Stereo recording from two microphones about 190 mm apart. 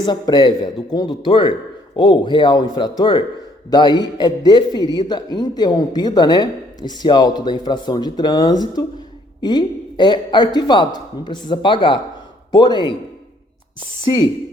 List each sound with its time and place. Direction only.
0.0 s a man's voice: 25° left (ahead or behind)